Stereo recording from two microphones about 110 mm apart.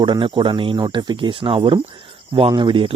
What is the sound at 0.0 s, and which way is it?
Speech, 50° right (ahead or behind).